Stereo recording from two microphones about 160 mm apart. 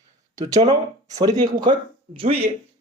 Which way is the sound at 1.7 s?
30° right (ahead or behind).